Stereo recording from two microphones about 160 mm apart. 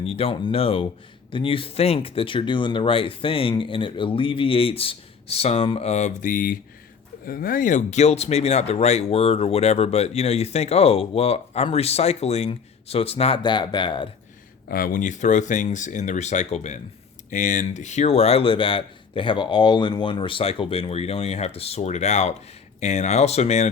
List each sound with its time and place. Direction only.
0.0 s speech: 35° left (ahead or behind)
14.7 s speech: 60° left (ahead or behind); by 23.6 s 45° left (ahead or behind)